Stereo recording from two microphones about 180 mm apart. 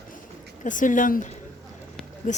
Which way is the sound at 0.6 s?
45° left (ahead or behind).